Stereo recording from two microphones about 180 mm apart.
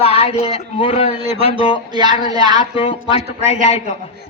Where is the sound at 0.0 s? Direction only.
35° left (ahead or behind).